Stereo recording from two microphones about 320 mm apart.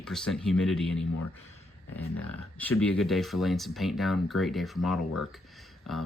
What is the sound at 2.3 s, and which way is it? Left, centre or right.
Speech, centre.